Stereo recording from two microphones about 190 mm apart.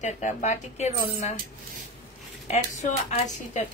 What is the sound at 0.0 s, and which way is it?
Speech, 40° left (ahead or behind).